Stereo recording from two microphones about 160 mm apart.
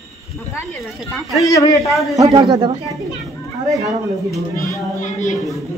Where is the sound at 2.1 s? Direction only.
25° right (ahead or behind).